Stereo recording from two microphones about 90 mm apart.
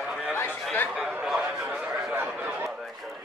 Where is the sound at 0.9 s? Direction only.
10° right (ahead or behind).